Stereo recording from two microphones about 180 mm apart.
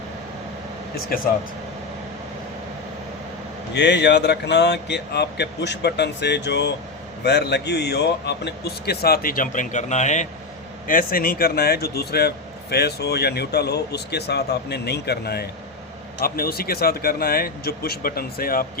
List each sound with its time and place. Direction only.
3.8 s a man's voice: 70° left (ahead or behind); by 18.6 s 55° left (ahead or behind)